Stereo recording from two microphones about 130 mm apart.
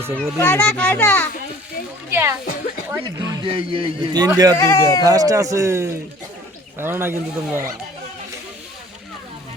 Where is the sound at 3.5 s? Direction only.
45° right (ahead or behind).